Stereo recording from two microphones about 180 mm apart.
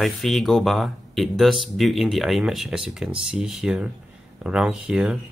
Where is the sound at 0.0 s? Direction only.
Centre (ahead or behind).